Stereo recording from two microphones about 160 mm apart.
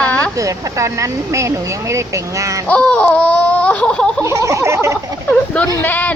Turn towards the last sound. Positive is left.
turn(degrees=10)  # may be behind; listen again after turning